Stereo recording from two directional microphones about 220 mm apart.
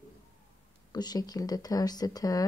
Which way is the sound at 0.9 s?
20° left (ahead or behind).